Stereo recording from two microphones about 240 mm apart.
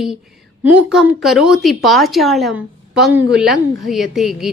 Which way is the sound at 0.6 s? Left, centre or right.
Centre.